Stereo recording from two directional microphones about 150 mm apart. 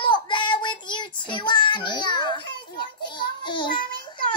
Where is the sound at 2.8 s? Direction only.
30° left (ahead or behind).